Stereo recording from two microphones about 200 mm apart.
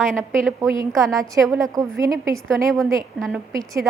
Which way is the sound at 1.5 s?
15° right (ahead or behind).